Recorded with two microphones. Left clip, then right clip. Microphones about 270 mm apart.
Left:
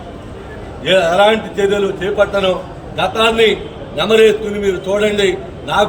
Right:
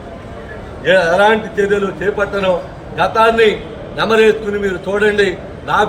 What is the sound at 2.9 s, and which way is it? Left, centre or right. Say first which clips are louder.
A man's voice: right 2 dB; centre.